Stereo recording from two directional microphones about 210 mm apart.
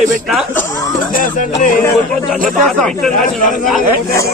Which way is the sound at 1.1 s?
40° left (ahead or behind).